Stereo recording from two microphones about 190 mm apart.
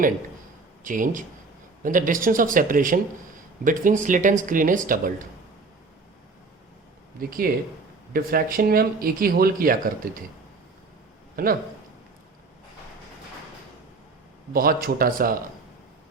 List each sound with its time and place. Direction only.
0.9 s speech: 45° right (ahead or behind)
7.2 s speech: 50° right (ahead or behind)
11.4 s speech: 50° right (ahead or behind)
14.5 s speech: 50° right (ahead or behind)